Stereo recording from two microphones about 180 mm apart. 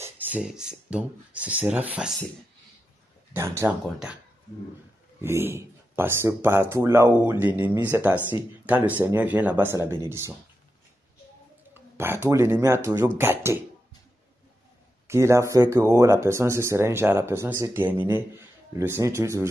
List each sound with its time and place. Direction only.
0.0 s speech: 10° right (ahead or behind)
3.3 s speech: 15° right (ahead or behind)
5.2 s speech: 15° right (ahead or behind)
11.7 s speech: 10° right (ahead or behind)
15.0 s speech: 15° right (ahead or behind)